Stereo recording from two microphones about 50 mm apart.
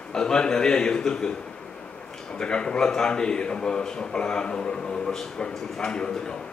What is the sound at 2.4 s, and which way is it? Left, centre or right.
A man's voice, centre.